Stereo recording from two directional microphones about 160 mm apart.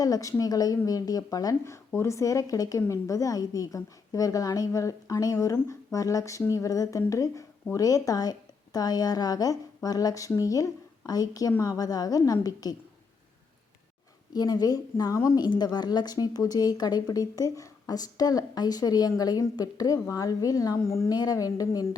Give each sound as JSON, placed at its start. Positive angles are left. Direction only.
{"t": 0.0, "sound": "a woman's voice", "side_deg": 20}
{"t": 14.3, "sound": "a woman's voice", "side_deg": 25}